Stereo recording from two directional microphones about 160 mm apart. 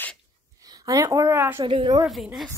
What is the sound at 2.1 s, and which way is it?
Speech, centre (ahead or behind).